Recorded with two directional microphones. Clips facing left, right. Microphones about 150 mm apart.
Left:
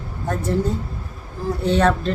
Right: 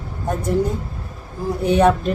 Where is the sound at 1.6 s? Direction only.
15° right (ahead or behind).